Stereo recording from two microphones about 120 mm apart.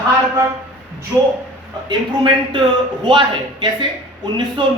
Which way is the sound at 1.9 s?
45° right (ahead or behind).